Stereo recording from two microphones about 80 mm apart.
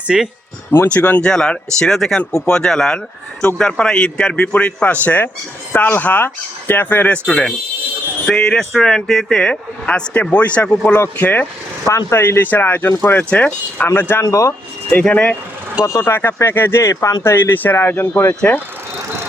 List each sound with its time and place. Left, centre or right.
0.1 s speech: centre
0.9 s speech: centre
1.3 s speech: centre
7.3 s speech: centre; by 14.2 s left
14.2 s speech: left
14.8 s speech: centre
15.8 s speech: left
16.9 s speech: left
17.2 s speech: left